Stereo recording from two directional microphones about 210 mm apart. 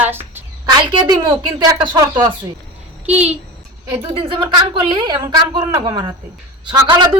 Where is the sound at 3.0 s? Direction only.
5° right (ahead or behind).